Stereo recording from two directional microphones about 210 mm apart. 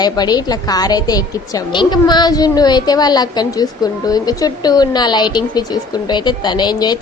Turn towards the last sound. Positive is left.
turn(degrees=20)  # may be behind; listen again after turning